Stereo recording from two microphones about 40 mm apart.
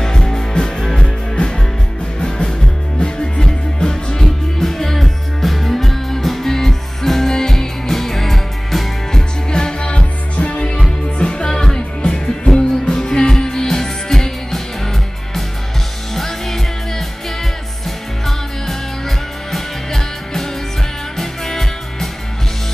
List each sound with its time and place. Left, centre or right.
0.0 s music: centre
9.5 s music: centre
16.2 s music: centre
18.2 s music: centre